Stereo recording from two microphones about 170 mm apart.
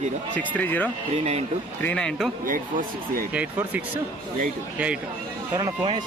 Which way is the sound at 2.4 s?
55° right (ahead or behind).